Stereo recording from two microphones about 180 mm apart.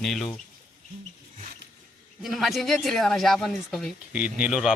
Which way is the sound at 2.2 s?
Centre (ahead or behind).